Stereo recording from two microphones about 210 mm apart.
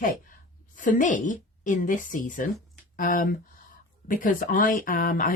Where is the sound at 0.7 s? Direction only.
40° left (ahead or behind).